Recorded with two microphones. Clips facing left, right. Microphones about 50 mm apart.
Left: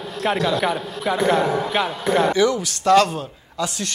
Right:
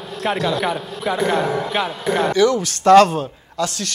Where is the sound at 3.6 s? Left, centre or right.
Centre.